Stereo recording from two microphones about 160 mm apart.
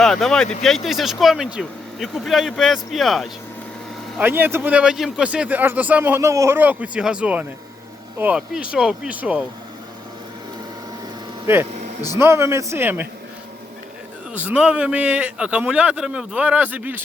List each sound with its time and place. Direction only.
0.0 s speech: centre (ahead or behind)
4.2 s speech: 10° right (ahead or behind)
12.1 s speech: 15° right (ahead or behind)
14.3 s speech: 10° right (ahead or behind)